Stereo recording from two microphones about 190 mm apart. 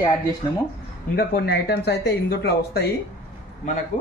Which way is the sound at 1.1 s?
55° left (ahead or behind).